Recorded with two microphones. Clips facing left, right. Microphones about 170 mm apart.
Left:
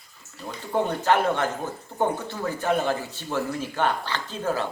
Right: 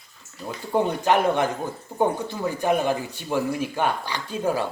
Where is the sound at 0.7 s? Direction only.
15° right (ahead or behind).